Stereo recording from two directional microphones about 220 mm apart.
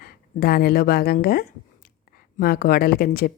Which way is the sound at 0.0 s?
45° left (ahead or behind).